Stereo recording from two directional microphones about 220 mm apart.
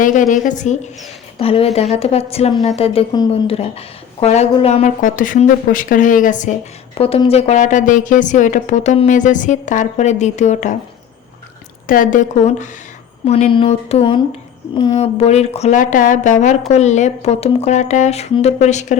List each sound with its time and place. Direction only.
0.0 s a woman's voice: 35° left (ahead or behind)
11.9 s a woman's voice: 40° left (ahead or behind)